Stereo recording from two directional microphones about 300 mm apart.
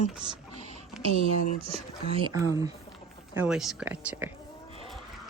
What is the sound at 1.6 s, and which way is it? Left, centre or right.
A woman's voice, centre.